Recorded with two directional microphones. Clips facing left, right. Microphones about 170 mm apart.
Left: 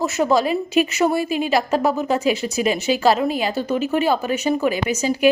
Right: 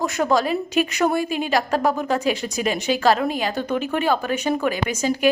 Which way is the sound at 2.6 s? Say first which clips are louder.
Left 2 dB; 45° right (ahead or behind).